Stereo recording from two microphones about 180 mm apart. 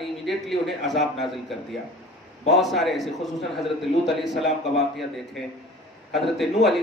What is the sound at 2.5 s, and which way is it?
Speech, centre (ahead or behind).